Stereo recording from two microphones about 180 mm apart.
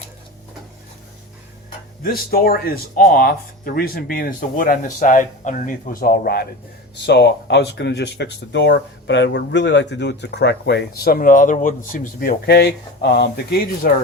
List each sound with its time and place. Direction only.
2.3 s speech: 60° left (ahead or behind)
11.0 s speech: 55° left (ahead or behind)